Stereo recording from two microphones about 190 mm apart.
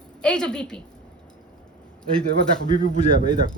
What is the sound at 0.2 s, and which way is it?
Speech, 5° left (ahead or behind).